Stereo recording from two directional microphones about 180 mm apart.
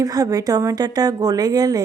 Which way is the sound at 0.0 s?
20° right (ahead or behind).